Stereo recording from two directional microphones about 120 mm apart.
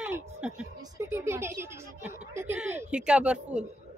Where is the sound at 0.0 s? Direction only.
15° right (ahead or behind).